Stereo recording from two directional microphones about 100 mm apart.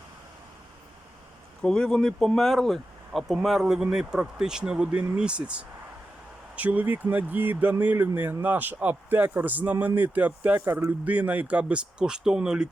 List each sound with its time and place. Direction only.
1.6 s speech: 5° left (ahead or behind)